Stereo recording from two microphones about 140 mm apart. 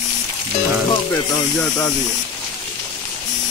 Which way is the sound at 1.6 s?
25° left (ahead or behind).